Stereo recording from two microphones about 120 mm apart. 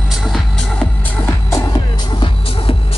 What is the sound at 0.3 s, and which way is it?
Music, 10° left (ahead or behind).